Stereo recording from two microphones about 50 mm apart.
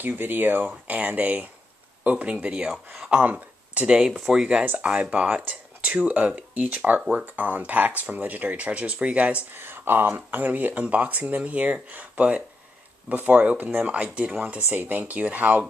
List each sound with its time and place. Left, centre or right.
0.0 s speech: right
3.8 s speech: centre
9.5 s speech: right
14.7 s speech: right